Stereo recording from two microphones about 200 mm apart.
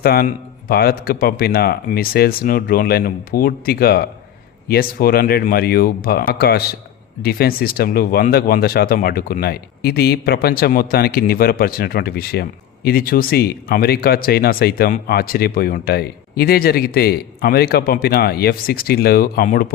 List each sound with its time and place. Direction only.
0.0 s speech: 50° left (ahead or behind)